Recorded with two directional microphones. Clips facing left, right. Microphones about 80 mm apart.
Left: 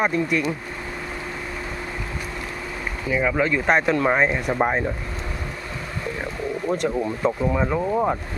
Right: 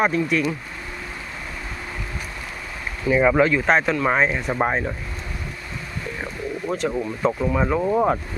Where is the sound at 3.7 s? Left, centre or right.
Centre.